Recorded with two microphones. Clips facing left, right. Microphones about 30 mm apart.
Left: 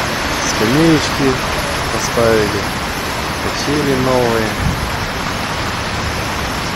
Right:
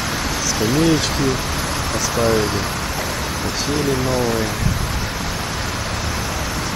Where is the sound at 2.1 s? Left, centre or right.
Left.